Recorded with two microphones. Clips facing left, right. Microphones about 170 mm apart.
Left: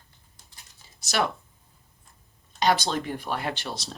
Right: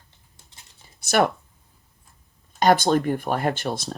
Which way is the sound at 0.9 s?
55° right (ahead or behind).